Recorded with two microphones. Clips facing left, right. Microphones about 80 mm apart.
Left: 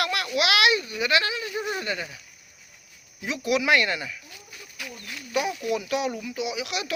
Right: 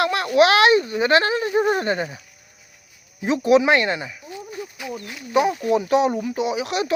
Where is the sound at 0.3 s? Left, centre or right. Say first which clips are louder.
Right 8 dB; right.